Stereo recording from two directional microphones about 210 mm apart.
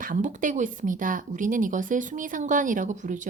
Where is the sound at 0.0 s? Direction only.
40° right (ahead or behind).